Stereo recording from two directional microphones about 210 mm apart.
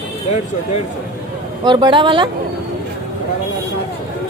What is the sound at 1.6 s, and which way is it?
Speech, 20° right (ahead or behind).